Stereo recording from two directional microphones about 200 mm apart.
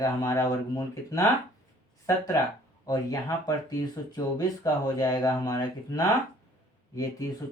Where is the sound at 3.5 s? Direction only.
20° left (ahead or behind).